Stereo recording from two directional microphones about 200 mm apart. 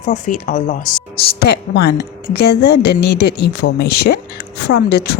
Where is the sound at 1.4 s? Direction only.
55° left (ahead or behind).